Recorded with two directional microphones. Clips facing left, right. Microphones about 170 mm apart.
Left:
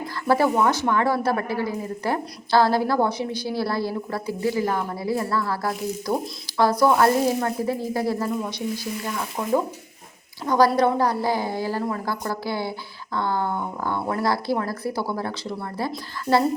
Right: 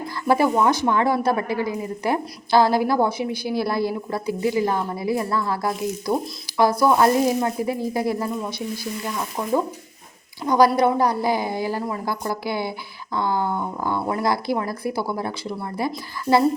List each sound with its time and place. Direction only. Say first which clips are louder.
0.3 s a woman's voice: right 1 dB; 15° right (ahead or behind)
10.4 s a woman's voice: right 2 dB; 15° right (ahead or behind)